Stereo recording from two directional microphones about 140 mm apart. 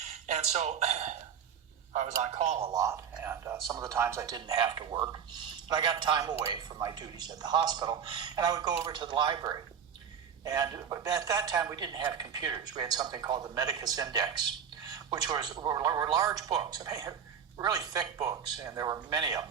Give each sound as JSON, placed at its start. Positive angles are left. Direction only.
{"t": 0.3, "sound": "speech", "side_deg": -55}
{"t": 2.7, "sound": "a woman's voice", "side_deg": -25}